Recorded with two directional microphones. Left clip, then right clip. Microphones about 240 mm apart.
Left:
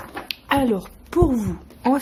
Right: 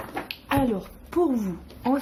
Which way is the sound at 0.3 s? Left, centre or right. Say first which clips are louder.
Left 5 dB; left.